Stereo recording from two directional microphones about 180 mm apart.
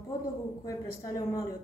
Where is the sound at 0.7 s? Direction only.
20° left (ahead or behind).